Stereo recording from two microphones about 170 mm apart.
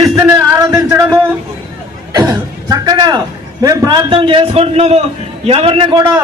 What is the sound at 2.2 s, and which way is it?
A man's voice, 20° right (ahead or behind).